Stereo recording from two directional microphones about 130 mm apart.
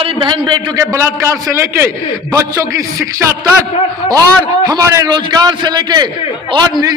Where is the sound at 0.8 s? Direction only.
20° right (ahead or behind).